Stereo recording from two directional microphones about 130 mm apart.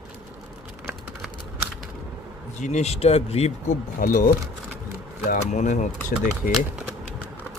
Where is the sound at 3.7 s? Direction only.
90° left.